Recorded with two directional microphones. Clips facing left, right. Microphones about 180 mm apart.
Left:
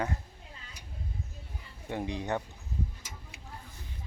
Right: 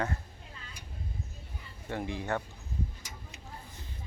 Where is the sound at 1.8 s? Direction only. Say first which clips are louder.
Left 1 dB; 15° left (ahead or behind).